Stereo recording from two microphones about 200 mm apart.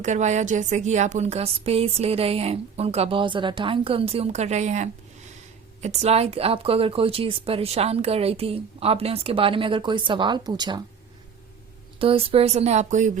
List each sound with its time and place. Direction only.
0.0 s speech: 35° right (ahead or behind); by 10.8 s 20° right (ahead or behind)
11.9 s speech: 25° right (ahead or behind)